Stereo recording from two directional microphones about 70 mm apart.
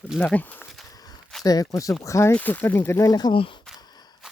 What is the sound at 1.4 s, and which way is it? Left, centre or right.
Speech, left.